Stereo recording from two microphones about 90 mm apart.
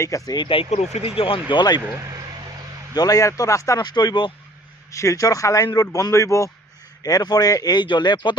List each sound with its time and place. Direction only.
0.0 s speech: 40° left (ahead or behind)
0.3 s speech: 80° left; by 1.8 s 55° left (ahead or behind)
2.0 s speech: 40° right (ahead or behind)
2.9 s speech: 45° left (ahead or behind)
3.8 s speech: 50° left (ahead or behind)
4.9 s speech: 35° left (ahead or behind)
7.0 s speech: 45° left (ahead or behind)